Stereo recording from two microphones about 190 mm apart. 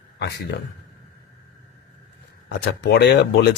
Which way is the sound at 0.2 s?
60° left (ahead or behind).